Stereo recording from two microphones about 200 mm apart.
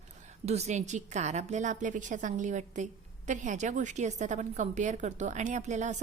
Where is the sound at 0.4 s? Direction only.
35° right (ahead or behind).